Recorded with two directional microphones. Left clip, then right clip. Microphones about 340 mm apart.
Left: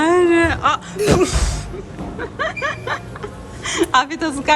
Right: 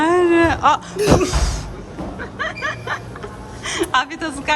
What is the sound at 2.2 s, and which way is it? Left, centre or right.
Music, centre.